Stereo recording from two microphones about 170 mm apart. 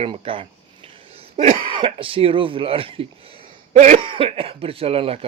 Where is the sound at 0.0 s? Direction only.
30° right (ahead or behind).